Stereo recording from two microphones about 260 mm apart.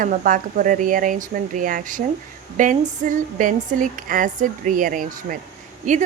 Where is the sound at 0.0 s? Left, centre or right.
Right.